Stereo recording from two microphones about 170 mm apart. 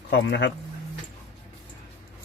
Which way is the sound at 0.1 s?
90° left.